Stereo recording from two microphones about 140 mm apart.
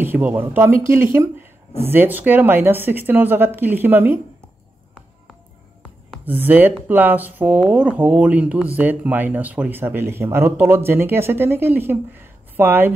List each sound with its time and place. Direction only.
0.0 s speech: 15° right (ahead or behind)
6.2 s speech: 15° right (ahead or behind)